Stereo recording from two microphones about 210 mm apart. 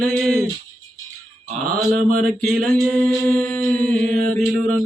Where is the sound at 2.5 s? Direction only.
Centre (ahead or behind).